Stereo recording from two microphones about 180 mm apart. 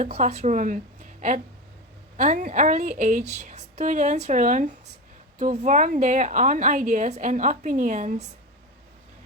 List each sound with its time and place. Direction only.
0.0 s speech: 40° right (ahead or behind)
2.1 s a woman's voice: 45° right (ahead or behind)